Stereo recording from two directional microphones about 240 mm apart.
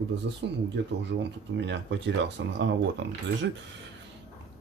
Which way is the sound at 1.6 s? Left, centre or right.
Right.